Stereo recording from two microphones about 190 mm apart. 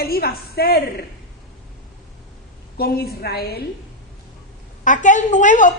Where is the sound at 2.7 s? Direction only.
55° left (ahead or behind).